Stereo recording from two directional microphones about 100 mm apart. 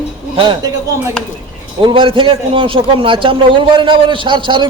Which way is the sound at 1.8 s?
55° right (ahead or behind).